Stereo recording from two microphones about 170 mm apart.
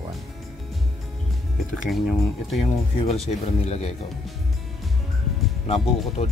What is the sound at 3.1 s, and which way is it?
Speech, 40° left (ahead or behind).